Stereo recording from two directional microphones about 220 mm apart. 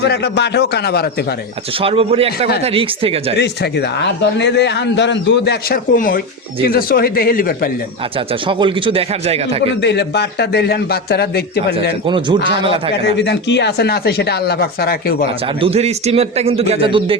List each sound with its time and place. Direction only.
0.0 s a man's voice: 50° left (ahead or behind)
1.8 s speech: 25° right (ahead or behind)
3.3 s a man's voice: 50° left (ahead or behind)
8.4 s speech: 20° right (ahead or behind)
9.8 s a man's voice: 50° left (ahead or behind)
12.0 s speech: 20° right (ahead or behind)
13.1 s a man's voice: 50° left (ahead or behind)
15.6 s speech: 30° right (ahead or behind)